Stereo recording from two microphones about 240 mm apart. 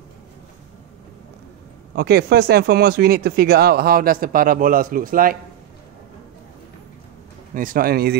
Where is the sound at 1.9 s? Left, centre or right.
Right.